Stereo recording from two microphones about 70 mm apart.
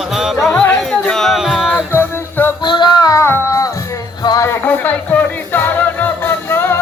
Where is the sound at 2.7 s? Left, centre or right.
Left.